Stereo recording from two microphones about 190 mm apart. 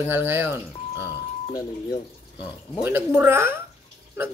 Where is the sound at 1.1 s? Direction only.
20° left (ahead or behind).